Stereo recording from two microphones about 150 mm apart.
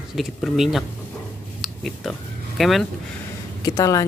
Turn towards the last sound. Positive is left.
turn(degrees=20)  # may be behind; listen again after turning